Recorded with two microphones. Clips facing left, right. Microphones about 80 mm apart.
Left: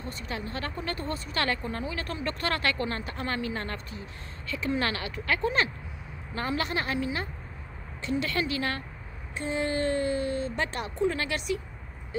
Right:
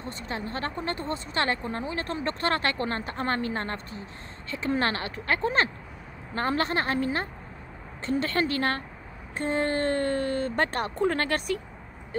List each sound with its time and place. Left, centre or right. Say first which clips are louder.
0.0 s speech: right 2 dB; right